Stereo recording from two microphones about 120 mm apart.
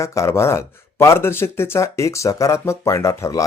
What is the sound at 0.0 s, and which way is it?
Speech, 25° left (ahead or behind).